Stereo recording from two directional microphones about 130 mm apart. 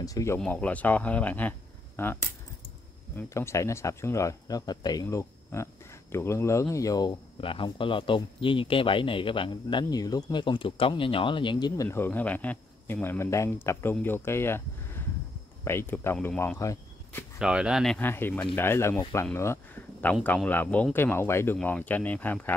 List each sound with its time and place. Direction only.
0.0 s speech: 25° left (ahead or behind)
0.4 s speech: 10° left (ahead or behind)
3.2 s speech: 20° left (ahead or behind)
7.3 s speech: 45° left (ahead or behind)
11.7 s speech: 20° left (ahead or behind)
16.5 s a sound: 25° left (ahead or behind)
17.4 s speech: 5° right (ahead or behind)
17.9 s speech: 15° left (ahead or behind)
19.3 s a sound: 20° left (ahead or behind)
20.4 s speech: 15° left (ahead or behind)